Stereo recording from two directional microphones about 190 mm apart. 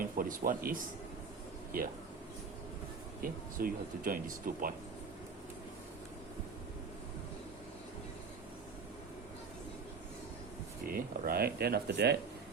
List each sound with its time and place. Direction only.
0.0 s speech: 50° right (ahead or behind)
3.2 s speech: 50° right (ahead or behind)
10.8 s speech: 50° right (ahead or behind)